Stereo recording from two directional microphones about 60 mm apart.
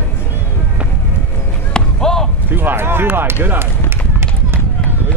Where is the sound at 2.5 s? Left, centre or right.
Right.